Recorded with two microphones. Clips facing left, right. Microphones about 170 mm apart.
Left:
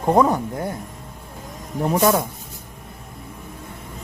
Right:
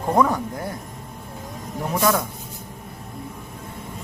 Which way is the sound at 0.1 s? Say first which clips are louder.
Left 3 dB; 20° left (ahead or behind).